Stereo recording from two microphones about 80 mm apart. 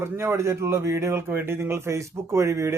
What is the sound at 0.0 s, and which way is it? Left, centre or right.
Speech, right.